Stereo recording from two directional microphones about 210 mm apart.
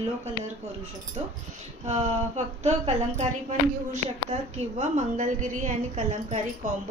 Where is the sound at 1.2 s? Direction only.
30° right (ahead or behind).